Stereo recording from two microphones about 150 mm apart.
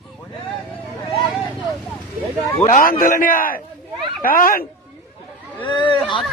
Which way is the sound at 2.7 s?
65° left (ahead or behind).